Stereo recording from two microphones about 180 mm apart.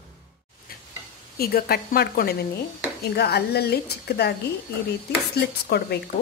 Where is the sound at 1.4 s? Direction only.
60° left (ahead or behind).